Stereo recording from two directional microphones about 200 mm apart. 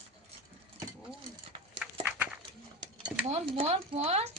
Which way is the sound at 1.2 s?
25° right (ahead or behind).